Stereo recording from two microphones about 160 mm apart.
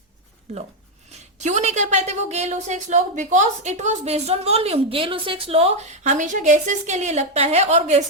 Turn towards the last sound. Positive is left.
turn(degrees=-45)  # may be behind; listen again after turning